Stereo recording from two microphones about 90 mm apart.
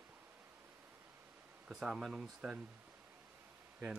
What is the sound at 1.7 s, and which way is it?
Speech, 5° right (ahead or behind).